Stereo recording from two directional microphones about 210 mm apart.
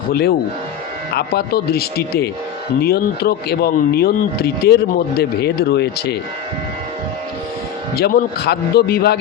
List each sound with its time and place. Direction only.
0.1 s speech: 50° left (ahead or behind)
7.9 s speech: 50° left (ahead or behind)